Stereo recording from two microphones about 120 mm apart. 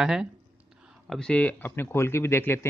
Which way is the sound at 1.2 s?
10° left (ahead or behind).